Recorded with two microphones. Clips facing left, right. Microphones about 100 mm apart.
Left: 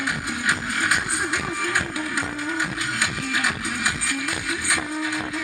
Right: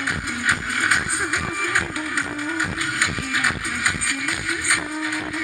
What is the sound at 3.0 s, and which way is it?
Music, 20° left (ahead or behind).